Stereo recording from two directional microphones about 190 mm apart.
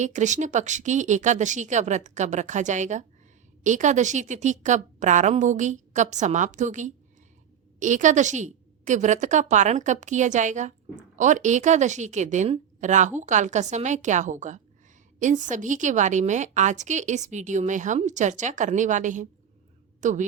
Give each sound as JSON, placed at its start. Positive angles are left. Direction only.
{"t": 0.0, "sound": "a woman's voice", "side_deg": -40}